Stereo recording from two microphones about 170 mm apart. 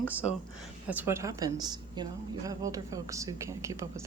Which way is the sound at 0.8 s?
10° right (ahead or behind).